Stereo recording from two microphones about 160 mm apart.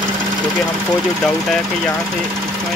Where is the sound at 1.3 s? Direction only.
Centre (ahead or behind).